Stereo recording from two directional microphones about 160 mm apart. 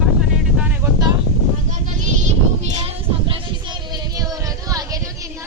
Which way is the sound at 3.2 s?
30° right (ahead or behind).